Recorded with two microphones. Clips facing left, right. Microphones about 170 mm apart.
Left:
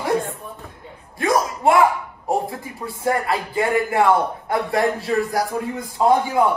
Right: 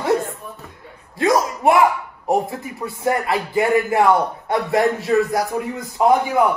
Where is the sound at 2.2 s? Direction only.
20° right (ahead or behind).